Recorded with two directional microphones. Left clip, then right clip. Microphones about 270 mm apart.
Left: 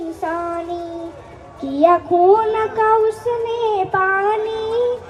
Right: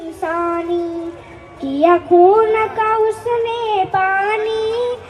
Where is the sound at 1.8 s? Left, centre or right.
Right.